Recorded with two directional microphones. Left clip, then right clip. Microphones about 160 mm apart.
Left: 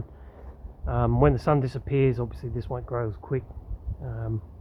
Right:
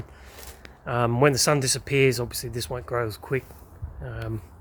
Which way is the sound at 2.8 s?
30° right (ahead or behind).